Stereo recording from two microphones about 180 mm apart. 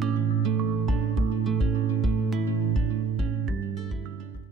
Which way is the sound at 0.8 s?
Centre (ahead or behind).